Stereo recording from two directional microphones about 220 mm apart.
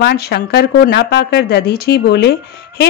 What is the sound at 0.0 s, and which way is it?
A woman's voice, 45° left (ahead or behind).